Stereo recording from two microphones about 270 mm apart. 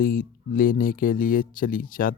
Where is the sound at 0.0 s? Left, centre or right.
Left.